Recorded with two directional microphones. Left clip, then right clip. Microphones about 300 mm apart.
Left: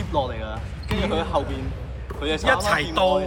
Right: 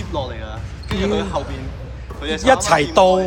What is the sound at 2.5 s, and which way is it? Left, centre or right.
Speech, centre.